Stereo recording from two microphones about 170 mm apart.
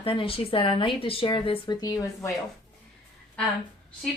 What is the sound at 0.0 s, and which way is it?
A woman's voice, 30° left (ahead or behind).